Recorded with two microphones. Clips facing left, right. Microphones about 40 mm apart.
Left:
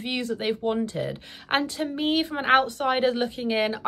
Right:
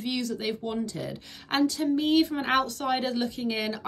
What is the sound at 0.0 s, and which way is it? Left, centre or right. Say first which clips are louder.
Speech: left 2 dB; left.